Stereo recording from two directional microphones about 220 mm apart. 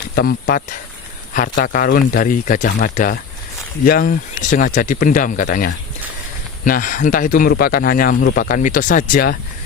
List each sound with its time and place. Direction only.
0.2 s speech: 45° left (ahead or behind)